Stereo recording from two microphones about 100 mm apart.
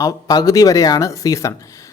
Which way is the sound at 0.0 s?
40° left (ahead or behind).